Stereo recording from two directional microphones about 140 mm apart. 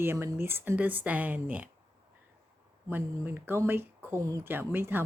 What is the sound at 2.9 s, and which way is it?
Speech, 15° right (ahead or behind).